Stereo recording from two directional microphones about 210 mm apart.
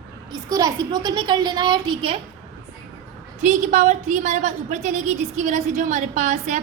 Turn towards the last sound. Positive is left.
turn(degrees=-35)  # may be behind; listen again after turning